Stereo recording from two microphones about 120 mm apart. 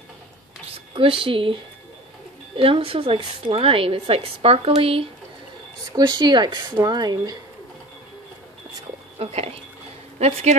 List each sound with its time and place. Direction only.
0.7 s a woman's voice: 45° right (ahead or behind)
5.9 s speech: 35° right (ahead or behind)
9.2 s speech: 60° right (ahead or behind)